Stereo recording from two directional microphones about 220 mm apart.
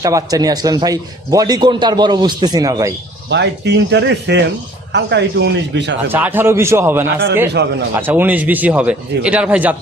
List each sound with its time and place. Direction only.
0.0 s a man's voice: 15° right (ahead or behind)
3.2 s speech: 50° right (ahead or behind)
6.1 s a man's voice: 10° right (ahead or behind)
7.4 s speech: 50° right (ahead or behind)
7.9 s a man's voice: 10° right (ahead or behind)